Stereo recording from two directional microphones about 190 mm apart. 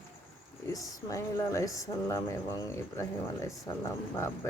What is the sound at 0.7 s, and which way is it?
Speech, 15° left (ahead or behind).